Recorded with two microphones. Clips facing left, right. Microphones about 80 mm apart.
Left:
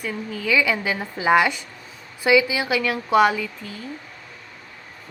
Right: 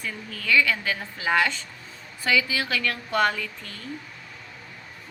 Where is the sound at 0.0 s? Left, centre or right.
Centre.